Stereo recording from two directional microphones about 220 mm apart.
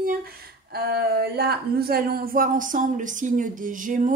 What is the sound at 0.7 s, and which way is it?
Speech, 45° right (ahead or behind).